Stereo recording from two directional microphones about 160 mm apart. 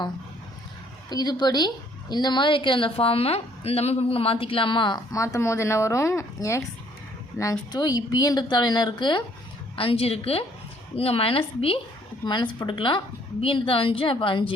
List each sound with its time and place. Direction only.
1.1 s a woman's voice: 25° left (ahead or behind)